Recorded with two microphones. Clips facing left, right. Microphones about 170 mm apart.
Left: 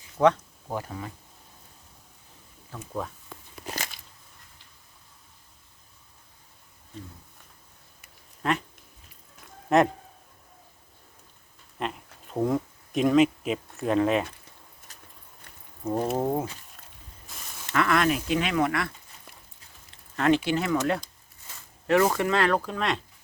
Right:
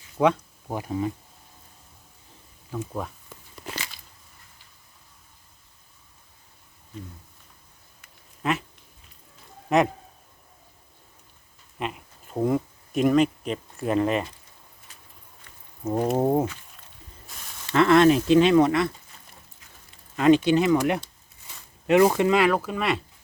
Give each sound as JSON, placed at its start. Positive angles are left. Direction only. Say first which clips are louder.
{"t": 0.2, "sound": "speech", "louder": "even", "side_deg": -15}
{"t": 2.7, "sound": "speech", "louder": "right 9 dB", "side_deg": -15}
{"t": 8.4, "sound": "speech", "louder": "right 1 dB", "side_deg": -5}
{"t": 9.6, "sound": "speech", "louder": "even", "side_deg": -5}
{"t": 11.8, "sound": "speech", "louder": "right 1 dB", "side_deg": -5}
{"t": 14.9, "sound": "a sound", "louder": "left 2 dB", "side_deg": 40}
{"t": 15.8, "sound": "speech", "louder": "right 3 dB", "side_deg": -5}
{"t": 16.1, "sound": "speech", "louder": "right 5 dB", "side_deg": -25}
{"t": 17.3, "sound": "a sound", "louder": "left 1 dB", "side_deg": 0}
{"t": 17.7, "sound": "speech", "louder": "right 7 dB", "side_deg": -25}
{"t": 20.1, "sound": "speech", "louder": "right 5 dB", "side_deg": -15}